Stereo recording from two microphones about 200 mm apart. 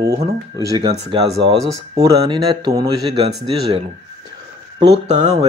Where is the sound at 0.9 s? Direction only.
30° right (ahead or behind).